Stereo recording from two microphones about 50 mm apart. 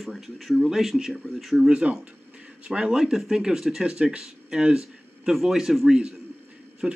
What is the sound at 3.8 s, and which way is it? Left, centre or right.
Speech, centre.